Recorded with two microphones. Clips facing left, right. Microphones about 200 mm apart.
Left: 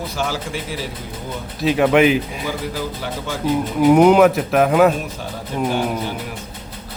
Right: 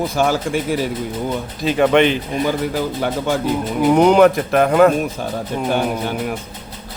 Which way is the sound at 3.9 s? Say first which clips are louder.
Even; 5° left (ahead or behind).